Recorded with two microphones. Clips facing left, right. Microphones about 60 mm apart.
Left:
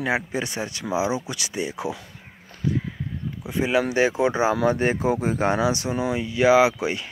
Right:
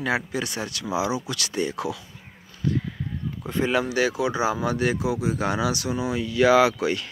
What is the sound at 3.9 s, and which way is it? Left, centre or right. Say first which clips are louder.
Speech: left 3 dB; left.